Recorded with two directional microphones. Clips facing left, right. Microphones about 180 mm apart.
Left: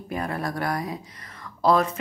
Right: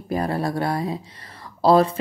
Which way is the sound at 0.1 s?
35° right (ahead or behind).